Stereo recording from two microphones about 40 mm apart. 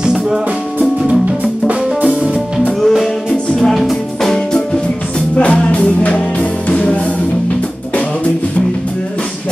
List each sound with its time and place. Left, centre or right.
1.4 s music: right
3.5 s music: centre
5.4 s music: left